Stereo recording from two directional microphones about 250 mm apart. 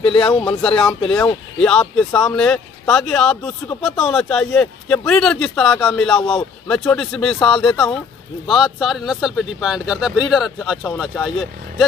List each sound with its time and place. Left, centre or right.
0.0 s speech: left
0.5 s speech: centre